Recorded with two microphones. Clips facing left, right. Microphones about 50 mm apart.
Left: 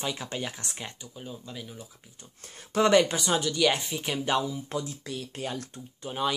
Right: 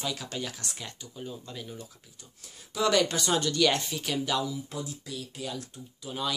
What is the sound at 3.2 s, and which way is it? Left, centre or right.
Speech, centre.